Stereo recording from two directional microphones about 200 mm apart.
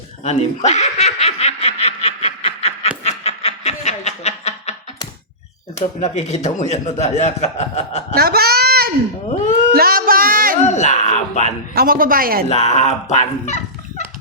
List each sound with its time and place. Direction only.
0.3 s baby laughter: 35° left (ahead or behind)
3.0 s snicker: 30° left (ahead or behind)
6.0 s a man's voice: 35° left (ahead or behind)
8.1 s a sound: 50° right (ahead or behind)
9.7 s music: 50° right (ahead or behind)
10.6 s a sound: 35° left (ahead or behind)
11.7 s a woman's voice: 45° right (ahead or behind)
12.5 s a man's voice: 35° left (ahead or behind)